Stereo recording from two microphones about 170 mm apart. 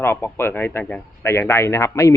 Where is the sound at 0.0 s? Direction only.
15° left (ahead or behind).